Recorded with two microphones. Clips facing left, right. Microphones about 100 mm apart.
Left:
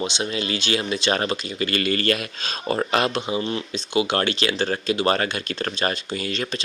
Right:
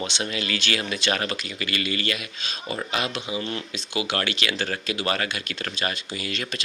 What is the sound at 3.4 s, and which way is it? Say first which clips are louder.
Speech: left 4 dB; 20° left (ahead or behind).